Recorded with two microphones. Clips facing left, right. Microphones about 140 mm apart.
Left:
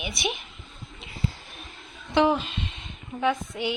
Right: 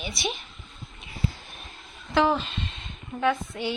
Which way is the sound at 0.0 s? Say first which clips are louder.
Left 1 dB; 20° left (ahead or behind).